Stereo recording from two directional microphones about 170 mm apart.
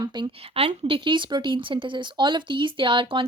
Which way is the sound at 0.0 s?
25° right (ahead or behind).